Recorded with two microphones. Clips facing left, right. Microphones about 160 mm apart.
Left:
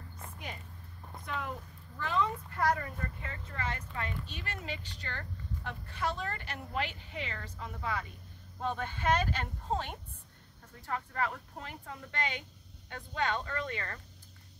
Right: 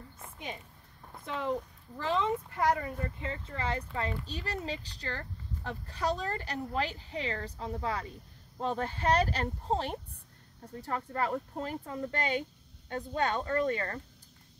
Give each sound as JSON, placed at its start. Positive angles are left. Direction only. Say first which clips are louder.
{"t": 1.2, "sound": "speech", "louder": "right 6 dB", "side_deg": -25}
{"t": 3.3, "sound": "speech", "louder": "right 5 dB", "side_deg": -30}